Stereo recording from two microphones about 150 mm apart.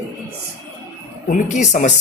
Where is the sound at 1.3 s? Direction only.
60° left (ahead or behind).